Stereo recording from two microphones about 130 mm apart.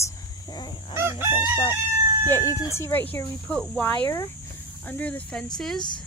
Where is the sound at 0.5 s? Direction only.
35° left (ahead or behind).